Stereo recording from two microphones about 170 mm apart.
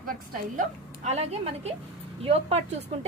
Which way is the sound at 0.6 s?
40° right (ahead or behind).